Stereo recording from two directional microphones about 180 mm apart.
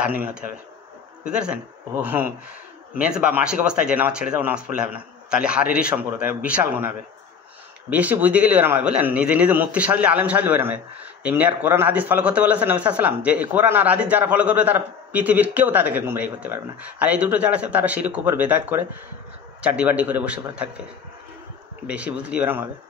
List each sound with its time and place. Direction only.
0.0 s a man's voice: 10° right (ahead or behind)
7.9 s speech: 10° right (ahead or behind)
21.8 s speech: 5° right (ahead or behind)